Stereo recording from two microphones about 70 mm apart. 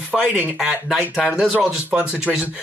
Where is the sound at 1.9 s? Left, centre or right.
Centre.